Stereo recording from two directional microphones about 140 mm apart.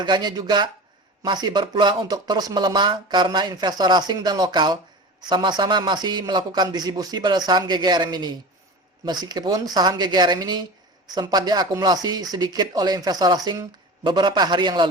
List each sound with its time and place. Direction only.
0.0 s speech: 30° right (ahead or behind)